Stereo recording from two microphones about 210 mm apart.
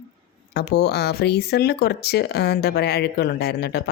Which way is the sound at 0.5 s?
50° left (ahead or behind).